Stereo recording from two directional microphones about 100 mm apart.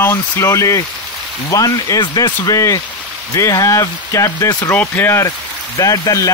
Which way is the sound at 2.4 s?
35° left (ahead or behind).